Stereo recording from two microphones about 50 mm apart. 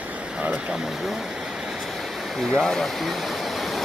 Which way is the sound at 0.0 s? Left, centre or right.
Right.